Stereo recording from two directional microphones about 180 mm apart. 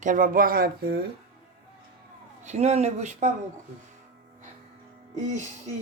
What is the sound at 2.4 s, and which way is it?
Speech, 35° right (ahead or behind).